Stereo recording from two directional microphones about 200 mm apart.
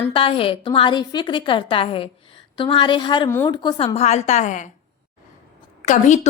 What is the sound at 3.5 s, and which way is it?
A woman's voice, 20° left (ahead or behind).